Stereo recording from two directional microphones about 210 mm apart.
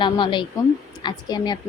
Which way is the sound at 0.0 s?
20° left (ahead or behind).